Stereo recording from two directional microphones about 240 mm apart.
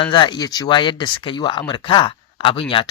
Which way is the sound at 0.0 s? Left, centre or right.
Centre.